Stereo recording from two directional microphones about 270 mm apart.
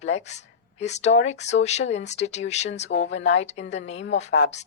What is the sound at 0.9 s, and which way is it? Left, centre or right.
A woman's voice, left.